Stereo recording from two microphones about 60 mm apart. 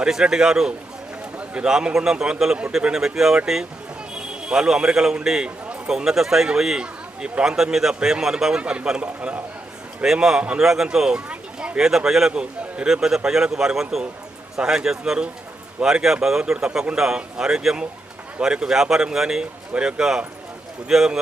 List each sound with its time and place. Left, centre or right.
0.0 s a man's voice: centre
11.3 s a sound: centre
11.8 s a man's voice: centre